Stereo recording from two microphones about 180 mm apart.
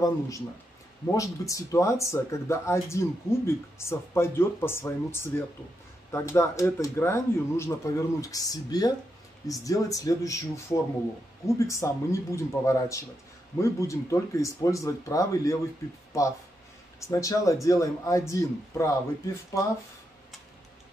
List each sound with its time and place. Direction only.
1.1 s speech: 15° left (ahead or behind)